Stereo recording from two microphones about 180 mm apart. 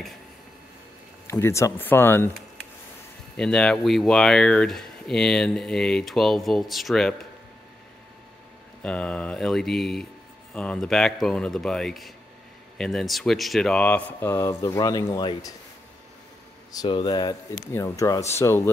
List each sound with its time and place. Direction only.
1.2 s speech: 15° left (ahead or behind)
3.3 s speech: 5° left (ahead or behind)
8.8 s speech: 5° left (ahead or behind); by 15.5 s 20° left (ahead or behind)
16.7 s speech: 25° left (ahead or behind)